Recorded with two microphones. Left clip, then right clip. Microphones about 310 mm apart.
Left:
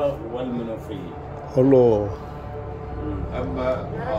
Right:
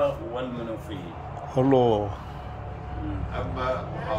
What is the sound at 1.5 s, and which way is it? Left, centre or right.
Speech, centre.